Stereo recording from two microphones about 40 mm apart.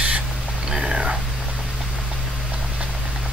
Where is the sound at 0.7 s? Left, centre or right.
Centre.